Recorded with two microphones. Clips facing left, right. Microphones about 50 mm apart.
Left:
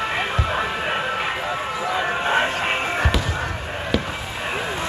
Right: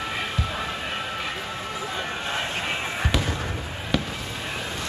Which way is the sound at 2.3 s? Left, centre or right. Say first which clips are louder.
Left 8 dB; left.